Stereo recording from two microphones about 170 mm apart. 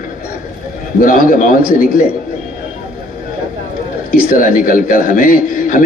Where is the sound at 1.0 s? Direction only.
55° left (ahead or behind).